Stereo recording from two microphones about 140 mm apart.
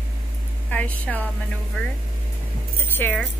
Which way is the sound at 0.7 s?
10° left (ahead or behind).